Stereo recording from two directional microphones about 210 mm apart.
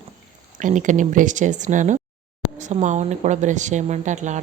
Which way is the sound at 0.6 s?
35° right (ahead or behind).